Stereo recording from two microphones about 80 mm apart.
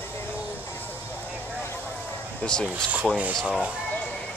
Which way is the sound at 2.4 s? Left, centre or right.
Centre.